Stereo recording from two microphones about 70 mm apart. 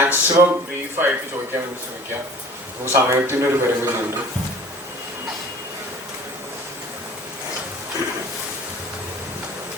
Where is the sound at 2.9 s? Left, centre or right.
Right.